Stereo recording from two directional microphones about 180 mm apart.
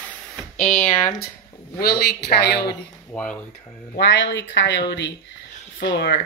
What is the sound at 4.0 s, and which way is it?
Speech, 80° left.